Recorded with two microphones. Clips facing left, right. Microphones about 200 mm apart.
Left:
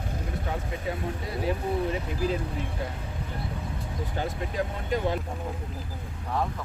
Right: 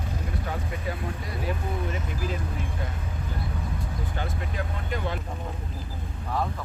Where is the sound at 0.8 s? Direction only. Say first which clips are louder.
Left 4 dB; 25° left (ahead or behind).